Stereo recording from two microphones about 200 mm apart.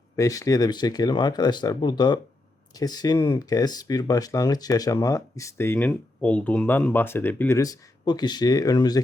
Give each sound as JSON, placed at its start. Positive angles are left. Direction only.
{"t": 0.2, "sound": "speech", "side_deg": 15}